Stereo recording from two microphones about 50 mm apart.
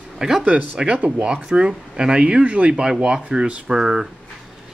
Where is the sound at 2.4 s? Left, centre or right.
Right.